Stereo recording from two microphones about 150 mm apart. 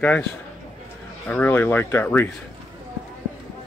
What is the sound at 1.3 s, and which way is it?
Speech, 15° left (ahead or behind).